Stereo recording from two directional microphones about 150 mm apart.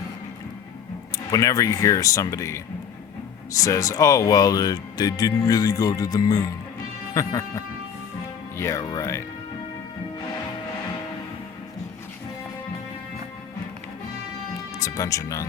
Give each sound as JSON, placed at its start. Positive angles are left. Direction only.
{"t": 1.3, "sound": "speech", "side_deg": 20}
{"t": 14.8, "sound": "speech", "side_deg": 20}